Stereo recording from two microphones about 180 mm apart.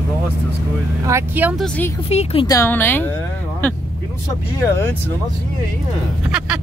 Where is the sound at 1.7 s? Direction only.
10° left (ahead or behind).